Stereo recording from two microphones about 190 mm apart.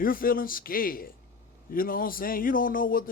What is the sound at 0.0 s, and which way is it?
A man's voice, 50° left (ahead or behind).